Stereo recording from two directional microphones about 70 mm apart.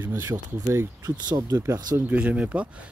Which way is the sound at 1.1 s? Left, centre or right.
Right.